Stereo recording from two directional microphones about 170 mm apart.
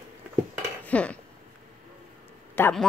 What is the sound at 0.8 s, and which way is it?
Dishes, 5° left (ahead or behind).